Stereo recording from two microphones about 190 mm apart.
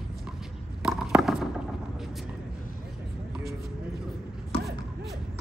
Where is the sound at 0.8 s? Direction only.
Centre (ahead or behind).